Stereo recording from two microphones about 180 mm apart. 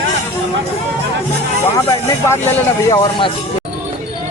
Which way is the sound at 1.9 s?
15° left (ahead or behind).